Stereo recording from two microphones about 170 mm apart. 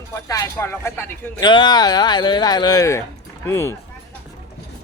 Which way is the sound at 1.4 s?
25° left (ahead or behind).